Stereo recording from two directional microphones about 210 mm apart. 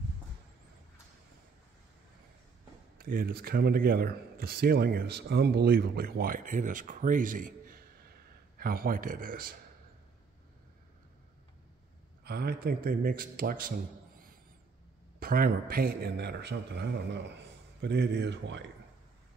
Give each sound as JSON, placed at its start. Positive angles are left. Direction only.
{"t": 3.0, "sound": "speech", "side_deg": -45}
{"t": 12.3, "sound": "speech", "side_deg": -50}